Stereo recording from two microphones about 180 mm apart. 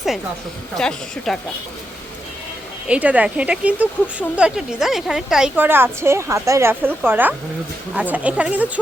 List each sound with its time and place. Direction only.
0.8 s speech: 5° left (ahead or behind)
2.8 s a woman's voice: 5° right (ahead or behind)